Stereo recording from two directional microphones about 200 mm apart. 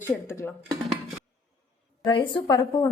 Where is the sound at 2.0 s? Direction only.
25° left (ahead or behind).